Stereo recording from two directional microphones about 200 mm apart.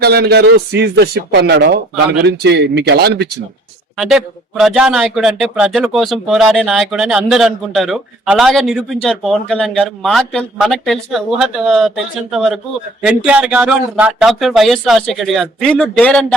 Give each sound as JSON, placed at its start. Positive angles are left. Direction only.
{"t": 0.0, "sound": "speech", "side_deg": -55}
{"t": 3.9, "sound": "speech", "side_deg": 0}